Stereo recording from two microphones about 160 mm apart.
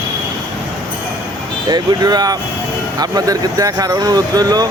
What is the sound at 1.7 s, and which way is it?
Speech, 25° right (ahead or behind).